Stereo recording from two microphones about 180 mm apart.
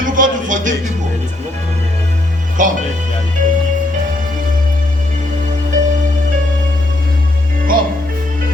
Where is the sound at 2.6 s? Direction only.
45° right (ahead or behind).